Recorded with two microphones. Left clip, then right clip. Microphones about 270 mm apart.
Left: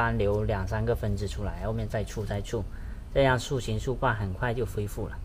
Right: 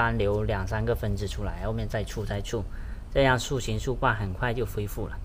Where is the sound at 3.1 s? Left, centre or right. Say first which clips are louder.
Right 1 dB; centre.